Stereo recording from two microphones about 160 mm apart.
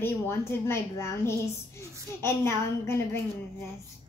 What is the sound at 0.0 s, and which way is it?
A woman's voice, 15° left (ahead or behind).